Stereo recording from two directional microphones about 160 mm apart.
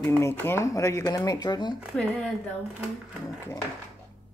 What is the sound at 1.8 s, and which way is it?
Speech, centre (ahead or behind).